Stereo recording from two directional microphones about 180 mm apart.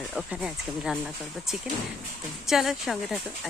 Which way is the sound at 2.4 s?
Centre (ahead or behind).